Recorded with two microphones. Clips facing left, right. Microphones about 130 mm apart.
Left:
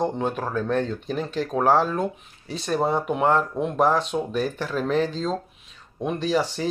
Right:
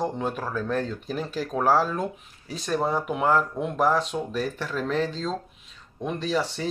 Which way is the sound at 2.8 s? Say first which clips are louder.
Left 3 dB; 25° left (ahead or behind).